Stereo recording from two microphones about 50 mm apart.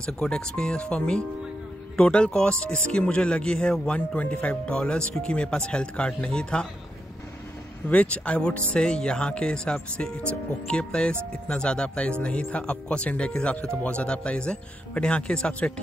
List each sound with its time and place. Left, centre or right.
0.0 s speech: centre
4.7 s speech: centre
7.9 s speech: left